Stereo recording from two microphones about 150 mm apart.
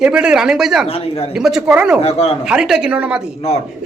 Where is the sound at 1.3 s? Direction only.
5° right (ahead or behind).